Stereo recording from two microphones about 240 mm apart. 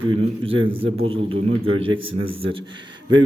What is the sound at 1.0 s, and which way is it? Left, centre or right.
Speech, right.